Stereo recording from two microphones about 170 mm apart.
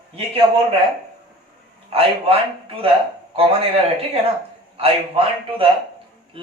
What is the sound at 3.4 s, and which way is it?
A man's voice, 35° right (ahead or behind).